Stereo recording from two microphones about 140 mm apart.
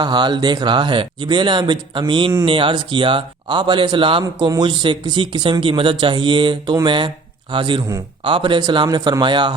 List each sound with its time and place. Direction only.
0.0 s speech: 30° right (ahead or behind)